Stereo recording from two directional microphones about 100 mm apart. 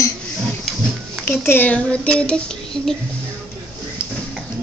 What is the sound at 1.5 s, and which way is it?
Speech, 15° left (ahead or behind).